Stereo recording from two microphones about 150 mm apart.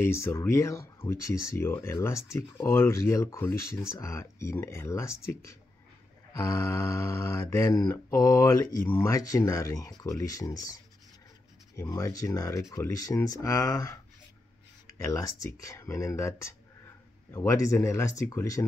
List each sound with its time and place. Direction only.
0.0 s speech: 15° left (ahead or behind)